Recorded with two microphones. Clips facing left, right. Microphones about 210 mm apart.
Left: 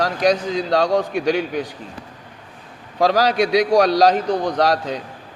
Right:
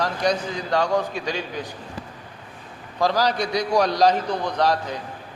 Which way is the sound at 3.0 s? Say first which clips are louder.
Left 5 dB; 90° left.